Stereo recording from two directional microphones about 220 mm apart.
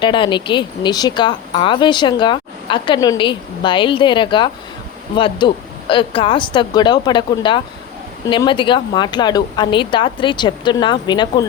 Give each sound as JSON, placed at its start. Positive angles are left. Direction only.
{"t": 0.0, "sound": "a woman's voice", "side_deg": 20}